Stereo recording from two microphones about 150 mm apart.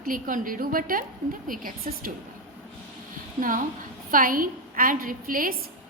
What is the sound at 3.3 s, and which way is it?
A woman's voice, 65° right (ahead or behind).